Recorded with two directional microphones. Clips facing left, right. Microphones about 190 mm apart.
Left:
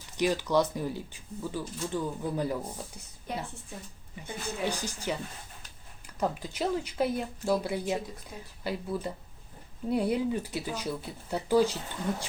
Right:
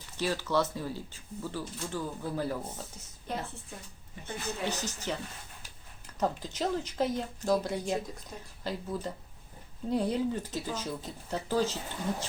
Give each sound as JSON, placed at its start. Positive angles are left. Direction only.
{"t": 0.2, "sound": "speech", "side_deg": 15}